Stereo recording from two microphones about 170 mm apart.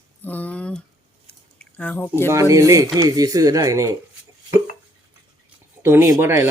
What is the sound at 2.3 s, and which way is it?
Speech, 20° right (ahead or behind).